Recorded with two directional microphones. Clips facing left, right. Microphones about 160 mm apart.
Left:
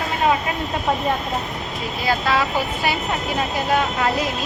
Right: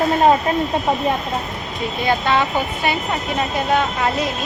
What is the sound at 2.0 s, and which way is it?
Speech, centre (ahead or behind).